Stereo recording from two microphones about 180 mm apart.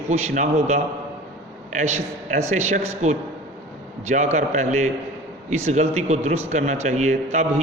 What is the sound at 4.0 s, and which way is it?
A man's voice, 40° right (ahead or behind).